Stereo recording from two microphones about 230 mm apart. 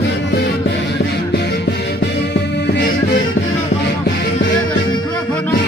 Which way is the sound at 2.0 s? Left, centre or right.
Left.